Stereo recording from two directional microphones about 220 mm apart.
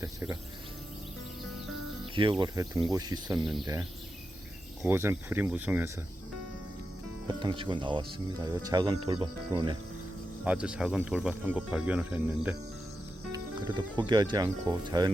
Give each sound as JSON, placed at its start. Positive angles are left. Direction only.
{"t": 0.0, "sound": "speech", "side_deg": -15}
{"t": 2.4, "sound": "speech", "side_deg": -20}
{"t": 3.3, "sound": "speech", "side_deg": 0}
{"t": 4.8, "sound": "speech", "side_deg": -10}
{"t": 7.3, "sound": "speech", "side_deg": -20}
{"t": 10.4, "sound": "speech", "side_deg": -5}
{"t": 13.3, "sound": "music", "side_deg": -20}
{"t": 14.1, "sound": "speech", "side_deg": -20}